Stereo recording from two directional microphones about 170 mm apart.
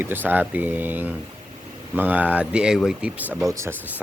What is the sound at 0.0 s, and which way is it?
Speech, 10° right (ahead or behind).